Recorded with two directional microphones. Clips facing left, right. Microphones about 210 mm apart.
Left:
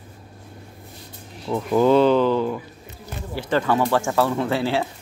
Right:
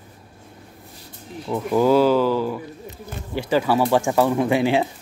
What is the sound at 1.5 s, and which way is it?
Speech, 5° right (ahead or behind).